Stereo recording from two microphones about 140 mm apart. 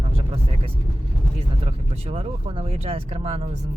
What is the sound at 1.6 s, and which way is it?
Speech, 45° right (ahead or behind).